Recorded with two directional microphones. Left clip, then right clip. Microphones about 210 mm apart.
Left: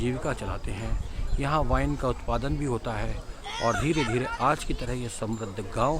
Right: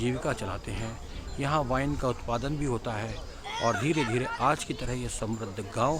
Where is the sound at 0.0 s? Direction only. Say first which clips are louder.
Even; centre (ahead or behind).